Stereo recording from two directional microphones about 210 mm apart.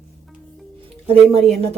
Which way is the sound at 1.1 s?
30° right (ahead or behind).